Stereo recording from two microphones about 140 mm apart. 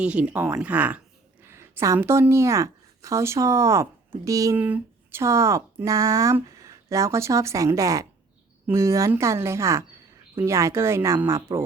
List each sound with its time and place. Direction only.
0.0 s speech: 10° right (ahead or behind); by 4.5 s 25° right (ahead or behind)
4.5 s speech: 10° right (ahead or behind)